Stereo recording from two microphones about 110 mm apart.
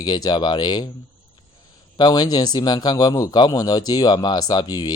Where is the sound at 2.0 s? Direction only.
40° left (ahead or behind).